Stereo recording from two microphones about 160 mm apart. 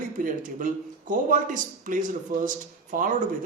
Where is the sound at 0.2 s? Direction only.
55° right (ahead or behind).